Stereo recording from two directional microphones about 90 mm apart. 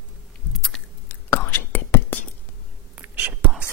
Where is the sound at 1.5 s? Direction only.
20° left (ahead or behind).